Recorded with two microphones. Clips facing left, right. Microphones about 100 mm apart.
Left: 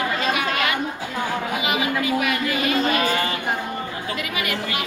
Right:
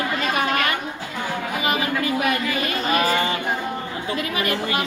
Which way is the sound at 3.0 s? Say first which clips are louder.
Right 1 dB; 30° right (ahead or behind).